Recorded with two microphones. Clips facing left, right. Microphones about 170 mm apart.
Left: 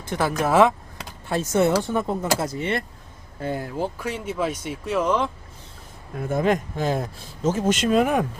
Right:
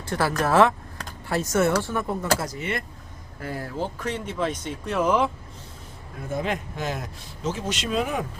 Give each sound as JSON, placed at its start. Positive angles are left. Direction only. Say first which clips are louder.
{"t": 0.1, "sound": "a sound", "louder": "left 1 dB", "side_deg": 20}
{"t": 1.5, "sound": "speech", "louder": "left 3 dB", "side_deg": 20}
{"t": 2.4, "sound": "speech", "louder": "left 4 dB", "side_deg": 25}
{"t": 4.9, "sound": "speech", "louder": "right 1 dB", "side_deg": -5}
{"t": 6.3, "sound": "speech", "louder": "left 6 dB", "side_deg": 45}
{"t": 7.4, "sound": "speech", "louder": "left 7 dB", "side_deg": 45}